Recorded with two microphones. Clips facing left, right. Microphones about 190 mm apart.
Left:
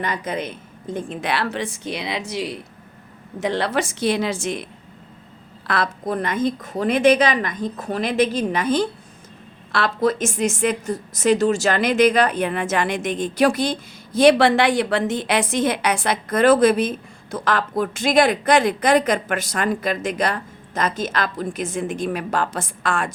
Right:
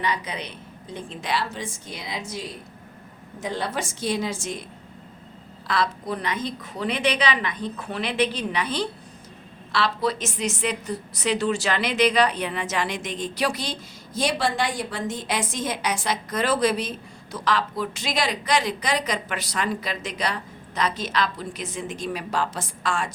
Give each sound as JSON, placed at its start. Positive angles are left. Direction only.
{"t": 0.0, "sound": "a woman's voice", "side_deg": 50}
{"t": 5.6, "sound": "a woman's voice", "side_deg": 55}